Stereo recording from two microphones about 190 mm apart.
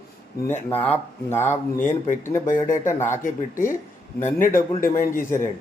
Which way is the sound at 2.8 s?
15° left (ahead or behind).